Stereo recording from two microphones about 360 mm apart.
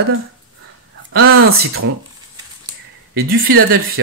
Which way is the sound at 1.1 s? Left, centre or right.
Right.